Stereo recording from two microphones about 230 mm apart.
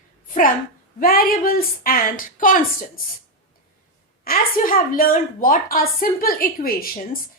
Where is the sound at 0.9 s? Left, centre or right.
Left.